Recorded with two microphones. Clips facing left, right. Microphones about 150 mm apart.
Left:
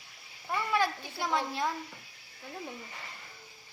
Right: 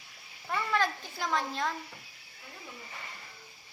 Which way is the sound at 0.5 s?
10° left (ahead or behind).